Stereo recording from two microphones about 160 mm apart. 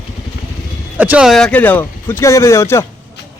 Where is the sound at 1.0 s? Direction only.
10° right (ahead or behind); by 2.8 s 15° left (ahead or behind).